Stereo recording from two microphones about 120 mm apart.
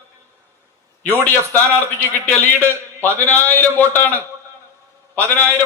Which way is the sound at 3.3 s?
15° left (ahead or behind).